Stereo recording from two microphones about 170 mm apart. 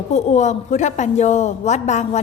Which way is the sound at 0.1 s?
45° left (ahead or behind).